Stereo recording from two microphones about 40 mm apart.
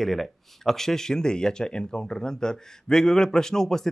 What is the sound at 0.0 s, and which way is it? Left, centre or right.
Speech, centre.